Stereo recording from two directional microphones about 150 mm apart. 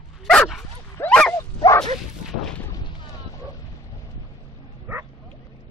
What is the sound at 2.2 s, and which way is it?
Speech, 5° left (ahead or behind).